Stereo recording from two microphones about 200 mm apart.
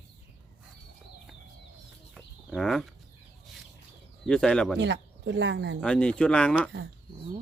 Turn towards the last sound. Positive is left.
turn(degrees=5)  # may be behind; listen again after turning